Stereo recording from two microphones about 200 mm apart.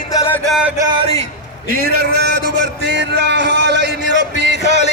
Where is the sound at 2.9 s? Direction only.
60° right (ahead or behind).